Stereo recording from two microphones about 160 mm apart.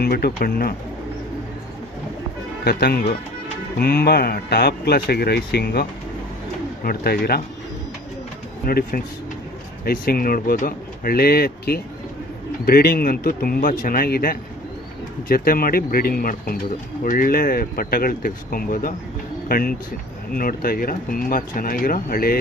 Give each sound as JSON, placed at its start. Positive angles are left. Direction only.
{"t": 0.0, "sound": "speech", "side_deg": 70}
{"t": 2.6, "sound": "speech", "side_deg": 75}
{"t": 6.8, "sound": "speech", "side_deg": 75}
{"t": 8.6, "sound": "speech", "side_deg": 65}